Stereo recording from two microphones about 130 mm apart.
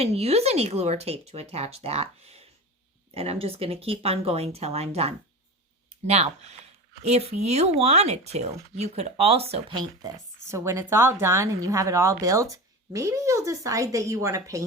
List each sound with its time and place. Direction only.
0.0 s speech: 55° right (ahead or behind)
10.5 s speech: 20° right (ahead or behind)